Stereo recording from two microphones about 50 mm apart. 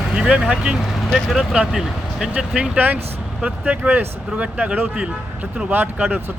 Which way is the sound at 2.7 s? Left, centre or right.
Right.